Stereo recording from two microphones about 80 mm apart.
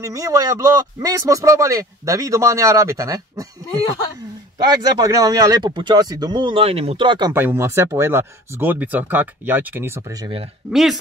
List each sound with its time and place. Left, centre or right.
0.0 s speech: right
4.6 s speech: right
5.7 s speech: right
6.0 s speech: right
7.0 s speech: right
7.3 s speech: right
10.7 s speech: centre